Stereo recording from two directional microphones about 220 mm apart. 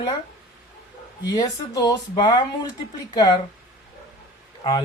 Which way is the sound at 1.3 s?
15° left (ahead or behind).